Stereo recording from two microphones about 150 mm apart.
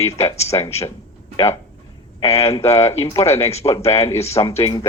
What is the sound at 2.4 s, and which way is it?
Speech, 20° left (ahead or behind).